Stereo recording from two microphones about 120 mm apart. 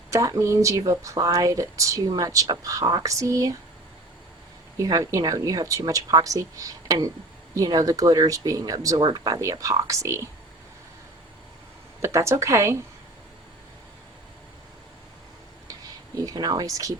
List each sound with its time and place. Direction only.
0.1 s speech: 25° right (ahead or behind)
4.8 s speech: 30° right (ahead or behind)
12.0 s speech: 25° right (ahead or behind)
16.2 s speech: 35° right (ahead or behind)